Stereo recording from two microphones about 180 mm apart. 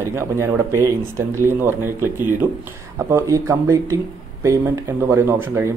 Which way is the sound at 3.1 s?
15° right (ahead or behind).